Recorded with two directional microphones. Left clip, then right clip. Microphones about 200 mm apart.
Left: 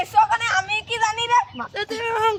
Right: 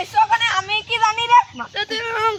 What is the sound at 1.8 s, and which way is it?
Speech, 60° left (ahead or behind).